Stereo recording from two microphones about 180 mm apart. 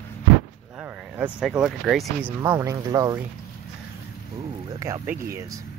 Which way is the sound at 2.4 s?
15° right (ahead or behind).